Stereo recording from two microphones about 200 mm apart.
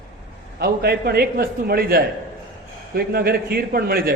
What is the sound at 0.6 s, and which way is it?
A man's voice, 50° right (ahead or behind).